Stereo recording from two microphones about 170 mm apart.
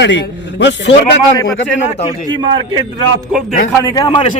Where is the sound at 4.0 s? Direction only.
30° left (ahead or behind).